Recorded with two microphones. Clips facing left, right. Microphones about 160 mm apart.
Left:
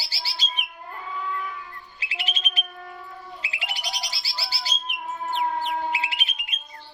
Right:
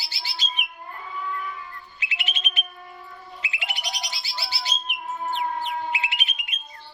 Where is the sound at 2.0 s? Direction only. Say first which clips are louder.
Left 1 dB; 35° left (ahead or behind).